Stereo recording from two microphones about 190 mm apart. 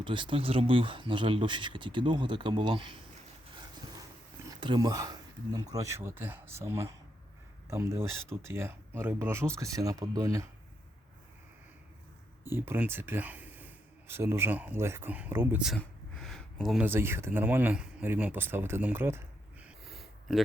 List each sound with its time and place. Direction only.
0.0 s speech: 25° right (ahead or behind)
4.6 s speech: 20° right (ahead or behind)
12.5 s speech: 10° right (ahead or behind)